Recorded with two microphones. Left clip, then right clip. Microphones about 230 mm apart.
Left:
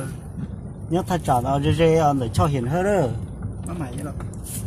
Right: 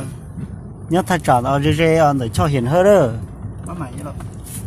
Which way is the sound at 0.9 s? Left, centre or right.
Right.